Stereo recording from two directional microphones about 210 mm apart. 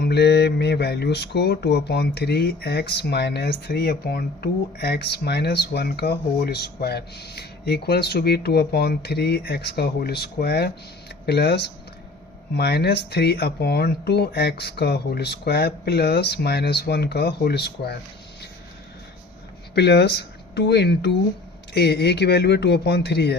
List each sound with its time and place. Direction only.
0.0 s speech: 50° left (ahead or behind)
19.7 s speech: 50° left (ahead or behind)